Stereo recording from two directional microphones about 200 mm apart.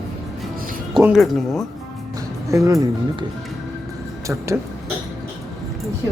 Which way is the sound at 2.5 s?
15° right (ahead or behind).